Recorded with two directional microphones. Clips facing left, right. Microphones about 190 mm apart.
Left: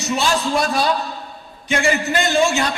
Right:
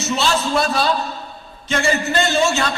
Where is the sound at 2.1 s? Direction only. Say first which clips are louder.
Left 1 dB; 15° left (ahead or behind).